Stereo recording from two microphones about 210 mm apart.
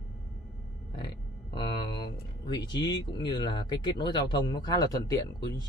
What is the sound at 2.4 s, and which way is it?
Speech, 20° left (ahead or behind).